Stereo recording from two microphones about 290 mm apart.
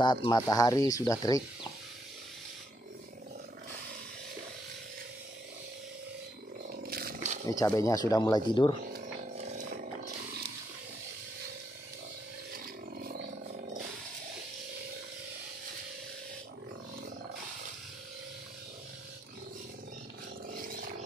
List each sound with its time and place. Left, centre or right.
0.0 s speech: centre
6.7 s roaring cats: right
7.4 s speech: centre